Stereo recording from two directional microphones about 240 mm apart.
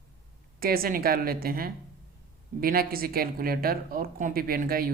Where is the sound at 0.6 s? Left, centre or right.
Right.